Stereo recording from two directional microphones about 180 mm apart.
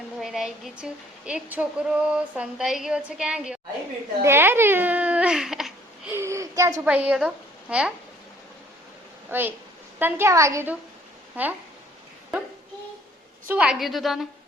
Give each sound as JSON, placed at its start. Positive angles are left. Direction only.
{"t": 0.2, "sound": "a woman's voice", "side_deg": 0}
{"t": 6.1, "sound": "a woman's voice", "side_deg": -15}
{"t": 9.3, "sound": "a woman's voice", "side_deg": -10}
{"t": 13.5, "sound": "a woman's voice", "side_deg": -5}